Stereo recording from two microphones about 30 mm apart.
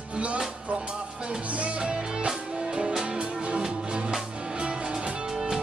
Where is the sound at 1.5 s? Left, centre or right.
Right.